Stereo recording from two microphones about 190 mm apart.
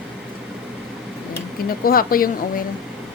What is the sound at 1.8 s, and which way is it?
Speech, 50° left (ahead or behind).